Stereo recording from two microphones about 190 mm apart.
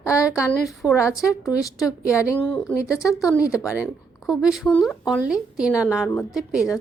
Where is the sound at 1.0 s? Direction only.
15° left (ahead or behind).